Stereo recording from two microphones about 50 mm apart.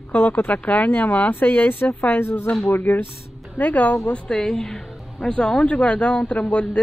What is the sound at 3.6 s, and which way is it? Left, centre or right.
Speech, left.